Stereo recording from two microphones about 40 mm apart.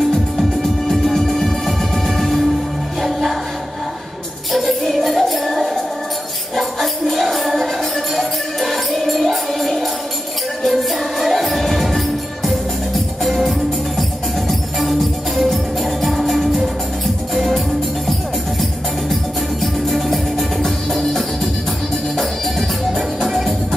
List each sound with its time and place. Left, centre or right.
0.1 s music: centre
4.5 s music: centre
19.6 s music: centre